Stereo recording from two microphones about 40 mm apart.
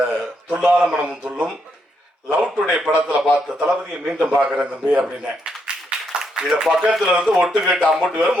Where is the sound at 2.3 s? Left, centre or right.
Right.